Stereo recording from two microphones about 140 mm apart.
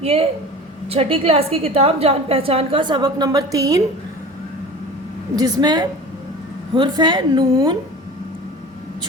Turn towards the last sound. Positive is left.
turn(degrees=-30)  # may be behind; listen again after turning